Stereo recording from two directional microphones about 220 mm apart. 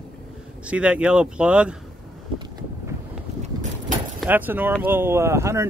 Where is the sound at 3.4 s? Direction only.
35° right (ahead or behind).